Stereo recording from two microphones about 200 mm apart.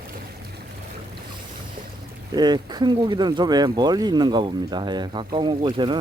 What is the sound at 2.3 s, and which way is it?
Speech, 20° right (ahead or behind).